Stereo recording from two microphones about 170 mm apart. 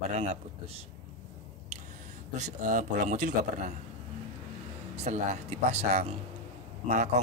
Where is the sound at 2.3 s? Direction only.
45° right (ahead or behind).